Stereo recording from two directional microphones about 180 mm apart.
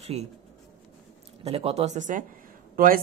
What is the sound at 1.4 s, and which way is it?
Speech, 35° right (ahead or behind).